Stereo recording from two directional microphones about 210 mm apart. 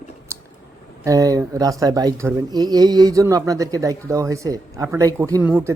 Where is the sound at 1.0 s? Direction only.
15° right (ahead or behind).